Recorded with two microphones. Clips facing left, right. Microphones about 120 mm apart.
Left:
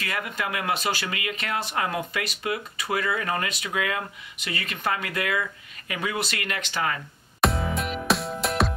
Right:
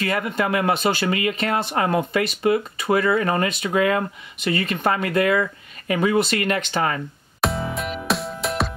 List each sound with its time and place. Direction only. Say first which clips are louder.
0.0 s speech: right 8 dB; 30° right (ahead or behind)
1.0 s speech: right 9 dB; 35° right (ahead or behind)
7.4 s music: right 1 dB; centre (ahead or behind)